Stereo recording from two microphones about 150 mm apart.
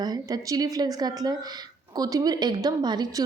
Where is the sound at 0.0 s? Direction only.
25° right (ahead or behind).